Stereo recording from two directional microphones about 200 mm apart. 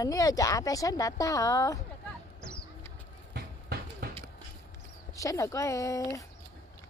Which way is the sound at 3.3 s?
55° right (ahead or behind).